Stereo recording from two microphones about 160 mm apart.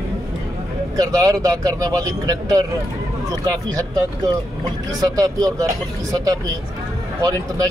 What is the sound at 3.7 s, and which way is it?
Speech, 25° right (ahead or behind).